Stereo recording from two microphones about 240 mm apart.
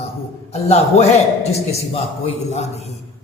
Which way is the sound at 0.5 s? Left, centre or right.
Left.